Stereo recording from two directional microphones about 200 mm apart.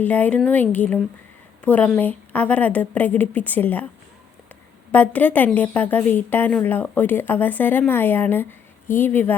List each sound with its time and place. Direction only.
0.0 s a woman's voice: 10° left (ahead or behind)
4.9 s a woman's voice: 10° left (ahead or behind)